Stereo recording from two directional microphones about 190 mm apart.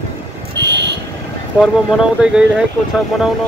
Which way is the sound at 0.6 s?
65° right (ahead or behind).